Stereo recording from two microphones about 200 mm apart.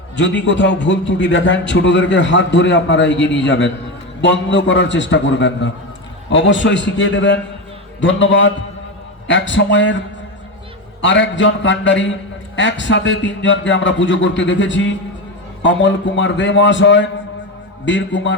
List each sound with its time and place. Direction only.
0.2 s a man's voice: 65° left (ahead or behind)
11.0 s a man's voice: 65° left (ahead or behind)